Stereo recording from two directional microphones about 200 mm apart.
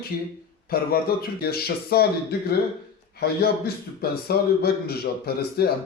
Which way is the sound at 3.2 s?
50° left (ahead or behind).